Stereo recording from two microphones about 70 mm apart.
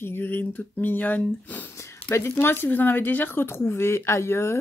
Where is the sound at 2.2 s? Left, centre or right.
Left.